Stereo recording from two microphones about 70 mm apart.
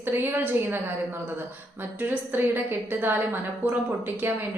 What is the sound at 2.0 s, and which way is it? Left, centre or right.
A woman's voice, right.